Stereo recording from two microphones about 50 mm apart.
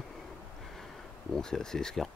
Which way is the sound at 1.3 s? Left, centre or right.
Centre.